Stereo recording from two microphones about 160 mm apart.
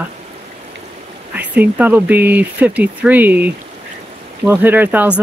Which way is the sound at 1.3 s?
10° right (ahead or behind).